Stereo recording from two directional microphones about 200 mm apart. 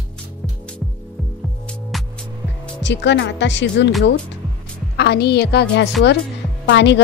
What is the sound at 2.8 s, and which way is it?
A woman's voice, 60° left (ahead or behind).